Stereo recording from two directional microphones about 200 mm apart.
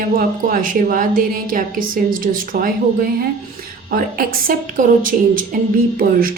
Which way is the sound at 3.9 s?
45° right (ahead or behind).